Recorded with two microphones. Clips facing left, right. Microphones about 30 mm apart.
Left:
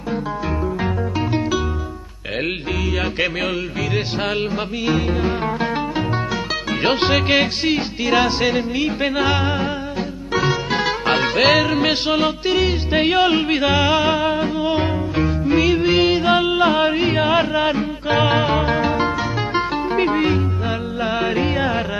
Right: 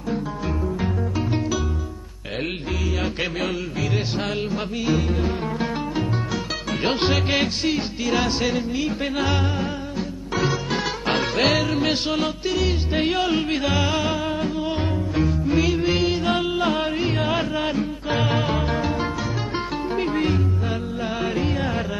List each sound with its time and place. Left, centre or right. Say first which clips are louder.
3.4 s music: left 3 dB; left